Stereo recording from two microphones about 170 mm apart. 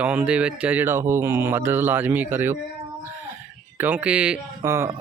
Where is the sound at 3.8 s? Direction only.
10° right (ahead or behind).